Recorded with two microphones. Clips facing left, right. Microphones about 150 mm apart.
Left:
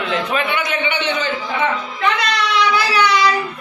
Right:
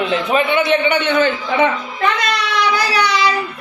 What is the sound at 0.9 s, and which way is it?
Speech, 55° right (ahead or behind).